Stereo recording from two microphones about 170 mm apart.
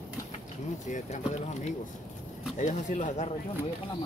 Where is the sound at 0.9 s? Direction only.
45° left (ahead or behind).